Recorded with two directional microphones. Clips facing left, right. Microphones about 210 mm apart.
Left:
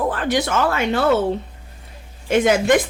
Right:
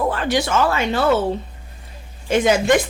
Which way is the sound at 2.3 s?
60° left (ahead or behind).